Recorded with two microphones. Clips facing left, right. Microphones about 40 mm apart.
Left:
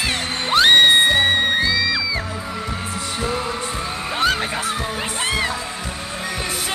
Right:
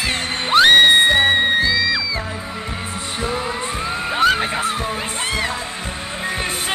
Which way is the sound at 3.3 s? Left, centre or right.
Centre.